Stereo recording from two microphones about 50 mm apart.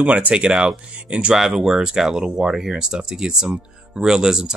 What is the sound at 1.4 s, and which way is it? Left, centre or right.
Speech, centre.